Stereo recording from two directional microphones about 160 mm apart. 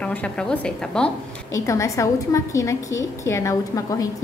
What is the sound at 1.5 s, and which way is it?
A woman's voice, 20° left (ahead or behind).